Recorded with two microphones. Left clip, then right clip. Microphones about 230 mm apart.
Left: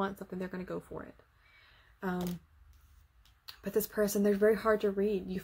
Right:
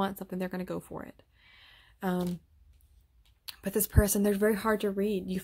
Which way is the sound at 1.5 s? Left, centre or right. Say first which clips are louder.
Right 4 dB; right.